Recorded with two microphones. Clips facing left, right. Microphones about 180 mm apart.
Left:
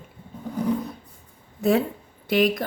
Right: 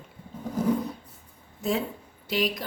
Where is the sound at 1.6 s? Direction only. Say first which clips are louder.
Left 7 dB; 60° left (ahead or behind).